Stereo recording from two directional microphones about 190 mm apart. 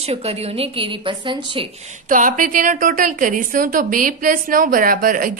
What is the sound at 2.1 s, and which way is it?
A woman's voice, 45° right (ahead or behind).